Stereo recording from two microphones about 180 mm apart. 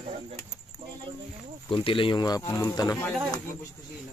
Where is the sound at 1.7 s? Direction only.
30° left (ahead or behind).